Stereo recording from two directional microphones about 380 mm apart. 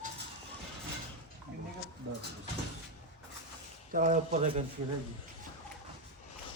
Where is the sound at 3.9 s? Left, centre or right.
Right.